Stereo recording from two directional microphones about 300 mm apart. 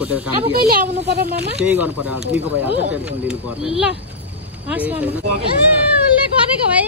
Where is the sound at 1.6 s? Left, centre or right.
Centre.